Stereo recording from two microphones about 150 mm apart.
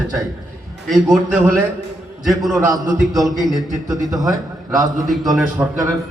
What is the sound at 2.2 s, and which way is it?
Speech, centre (ahead or behind).